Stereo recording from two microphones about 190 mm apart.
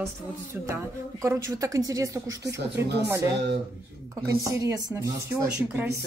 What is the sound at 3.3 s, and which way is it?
Speech, 65° right (ahead or behind).